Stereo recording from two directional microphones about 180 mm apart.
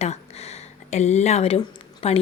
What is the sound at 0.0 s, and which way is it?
A woman's voice, 35° left (ahead or behind).